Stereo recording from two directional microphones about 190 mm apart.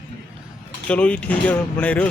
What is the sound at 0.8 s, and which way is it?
Speech, 5° left (ahead or behind).